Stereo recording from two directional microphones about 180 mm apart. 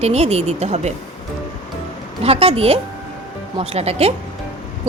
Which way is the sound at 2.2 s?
35° right (ahead or behind).